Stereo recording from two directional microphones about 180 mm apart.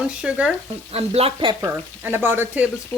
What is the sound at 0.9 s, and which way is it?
Speech, 35° right (ahead or behind).